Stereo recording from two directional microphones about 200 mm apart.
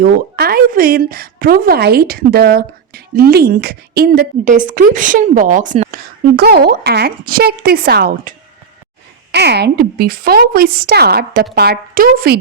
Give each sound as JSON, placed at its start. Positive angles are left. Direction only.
{"t": 0.0, "sound": "a woman's voice", "side_deg": -50}